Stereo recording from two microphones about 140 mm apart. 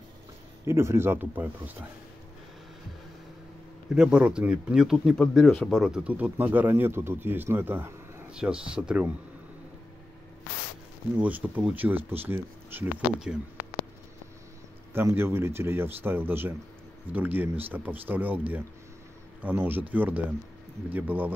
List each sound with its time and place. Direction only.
0.7 s speech: 20° right (ahead or behind)
3.9 s speech: 5° right (ahead or behind)
11.1 s speech: 10° right (ahead or behind)
14.9 s speech: 15° right (ahead or behind)
19.4 s speech: 15° right (ahead or behind)